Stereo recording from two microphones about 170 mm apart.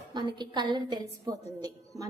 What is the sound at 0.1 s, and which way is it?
A woman's voice, 25° right (ahead or behind).